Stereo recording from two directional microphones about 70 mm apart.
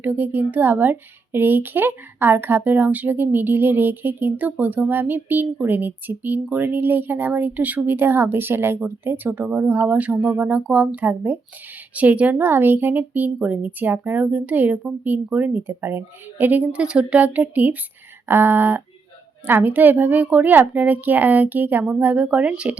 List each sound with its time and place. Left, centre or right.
0.0 s speech: right
12.4 s speech: right
18.3 s a sound: right
19.5 s speech: right